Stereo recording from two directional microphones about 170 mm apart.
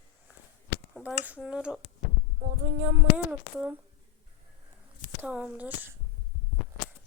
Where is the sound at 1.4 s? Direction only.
5° right (ahead or behind).